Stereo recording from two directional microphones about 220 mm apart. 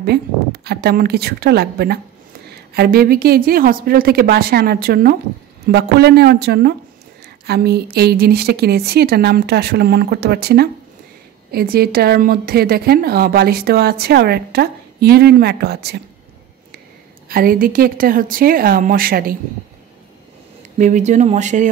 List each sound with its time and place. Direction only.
0.0 s a woman's voice: 45° right (ahead or behind)
17.3 s a woman's voice: 40° right (ahead or behind)
20.7 s a woman's voice: 35° right (ahead or behind)